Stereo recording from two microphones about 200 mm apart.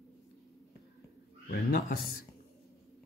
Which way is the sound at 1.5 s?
40° left (ahead or behind).